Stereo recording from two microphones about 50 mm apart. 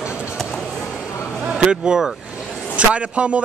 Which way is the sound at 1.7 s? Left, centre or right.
Centre.